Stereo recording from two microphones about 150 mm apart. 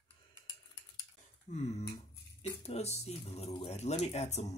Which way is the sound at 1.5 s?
45° left (ahead or behind).